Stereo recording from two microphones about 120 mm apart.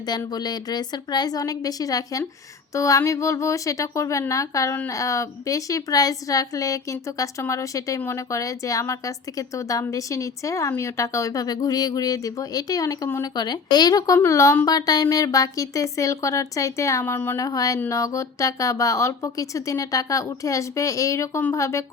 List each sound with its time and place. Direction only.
0.3 s a woman's voice: 35° left (ahead or behind)